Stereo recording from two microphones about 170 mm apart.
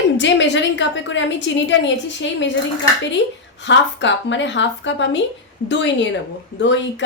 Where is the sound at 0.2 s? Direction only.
90° left.